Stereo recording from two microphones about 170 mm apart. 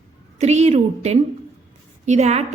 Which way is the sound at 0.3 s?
40° right (ahead or behind).